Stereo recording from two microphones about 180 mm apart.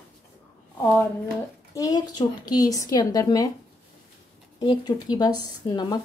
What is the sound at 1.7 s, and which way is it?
Speech, 20° left (ahead or behind).